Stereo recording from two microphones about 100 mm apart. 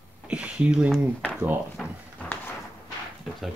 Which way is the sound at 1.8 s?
5° left (ahead or behind).